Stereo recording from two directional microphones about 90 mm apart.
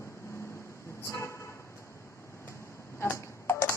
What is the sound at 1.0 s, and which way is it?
Vehicle, 30° left (ahead or behind).